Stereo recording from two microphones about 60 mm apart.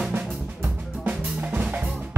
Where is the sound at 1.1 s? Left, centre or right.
Right.